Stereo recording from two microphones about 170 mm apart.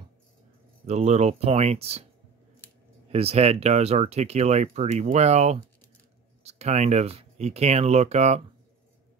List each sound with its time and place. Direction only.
0.8 s speech: 40° right (ahead or behind)
3.1 s speech: 40° right (ahead or behind)